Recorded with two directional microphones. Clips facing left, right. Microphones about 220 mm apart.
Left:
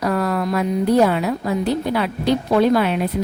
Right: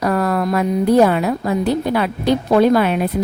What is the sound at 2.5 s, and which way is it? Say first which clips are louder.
Speech: right 3 dB; 50° right (ahead or behind).